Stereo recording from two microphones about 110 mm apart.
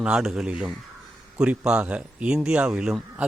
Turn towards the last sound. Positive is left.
turn(degrees=-5)  # may be behind; listen again after turning